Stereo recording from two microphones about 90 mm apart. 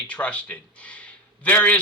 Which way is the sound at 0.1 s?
15° left (ahead or behind).